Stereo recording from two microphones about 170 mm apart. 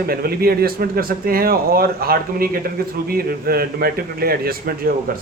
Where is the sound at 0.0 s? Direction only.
60° right (ahead or behind).